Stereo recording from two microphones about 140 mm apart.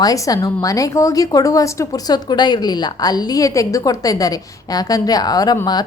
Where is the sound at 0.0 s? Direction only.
25° left (ahead or behind).